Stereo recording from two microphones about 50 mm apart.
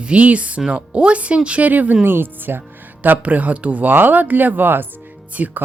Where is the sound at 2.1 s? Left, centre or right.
Right.